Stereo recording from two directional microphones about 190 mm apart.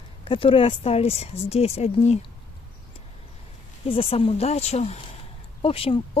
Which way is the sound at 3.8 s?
30° left (ahead or behind).